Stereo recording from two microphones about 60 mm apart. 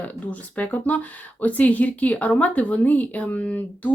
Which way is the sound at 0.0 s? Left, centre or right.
Left.